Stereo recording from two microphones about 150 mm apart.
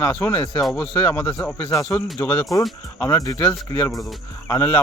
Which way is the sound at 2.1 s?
15° left (ahead or behind).